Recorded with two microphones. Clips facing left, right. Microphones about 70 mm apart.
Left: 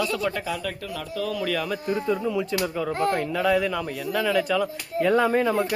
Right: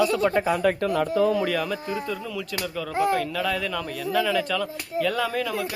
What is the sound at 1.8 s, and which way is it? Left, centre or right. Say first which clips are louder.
Speech: left 5 dB; left.